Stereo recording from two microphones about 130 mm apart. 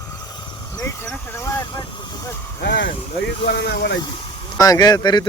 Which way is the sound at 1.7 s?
40° left (ahead or behind).